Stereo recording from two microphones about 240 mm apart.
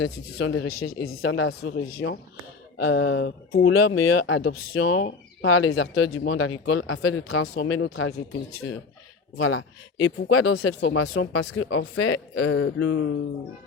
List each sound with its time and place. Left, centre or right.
0.0 s speech: left